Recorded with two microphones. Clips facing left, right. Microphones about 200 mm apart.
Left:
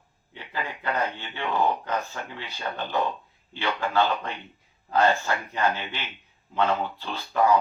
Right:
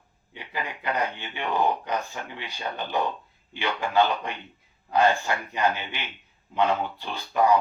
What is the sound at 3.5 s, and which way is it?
Speech, 15° right (ahead or behind).